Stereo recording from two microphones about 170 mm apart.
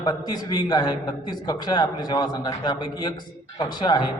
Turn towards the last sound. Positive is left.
turn(degrees=25)  # may be behind; listen again after turning